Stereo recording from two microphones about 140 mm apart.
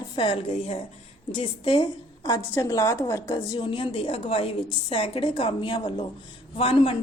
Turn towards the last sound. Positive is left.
turn(degrees=40)  # may be behind; listen again after turning